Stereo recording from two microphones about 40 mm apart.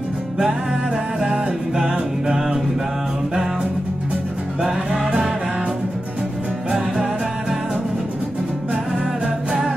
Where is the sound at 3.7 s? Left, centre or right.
Right.